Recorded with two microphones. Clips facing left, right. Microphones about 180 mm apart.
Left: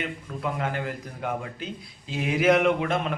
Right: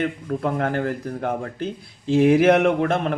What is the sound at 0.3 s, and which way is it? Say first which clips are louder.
A man's voice: right 5 dB; 50° right (ahead or behind).